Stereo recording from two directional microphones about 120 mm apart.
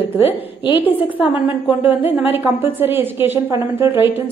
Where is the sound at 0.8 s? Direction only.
15° right (ahead or behind).